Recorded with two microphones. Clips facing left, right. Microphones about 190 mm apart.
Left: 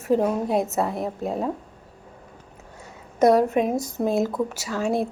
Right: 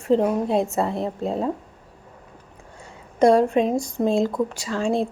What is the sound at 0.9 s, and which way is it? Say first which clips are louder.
Speech: right 2 dB; 25° right (ahead or behind).